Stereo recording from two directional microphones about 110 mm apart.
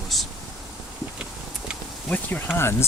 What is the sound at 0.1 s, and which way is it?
Rain, centre (ahead or behind).